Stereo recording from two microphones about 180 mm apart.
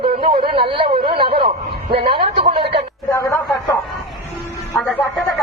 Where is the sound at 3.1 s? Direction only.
20° left (ahead or behind).